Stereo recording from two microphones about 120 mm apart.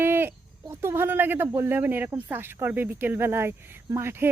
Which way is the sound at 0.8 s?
20° right (ahead or behind).